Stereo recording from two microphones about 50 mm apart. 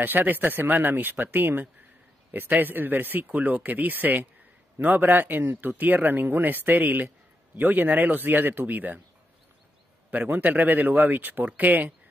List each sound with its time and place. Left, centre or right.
0.0 s speech: right
10.1 s speech: right